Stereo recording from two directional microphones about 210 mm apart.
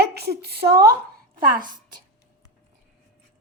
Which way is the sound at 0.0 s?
50° right (ahead or behind).